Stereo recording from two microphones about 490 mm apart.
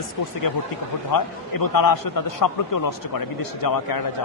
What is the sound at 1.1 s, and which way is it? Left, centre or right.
A man's voice, left.